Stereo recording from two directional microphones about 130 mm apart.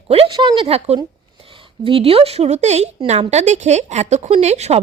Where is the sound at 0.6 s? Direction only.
50° right (ahead or behind).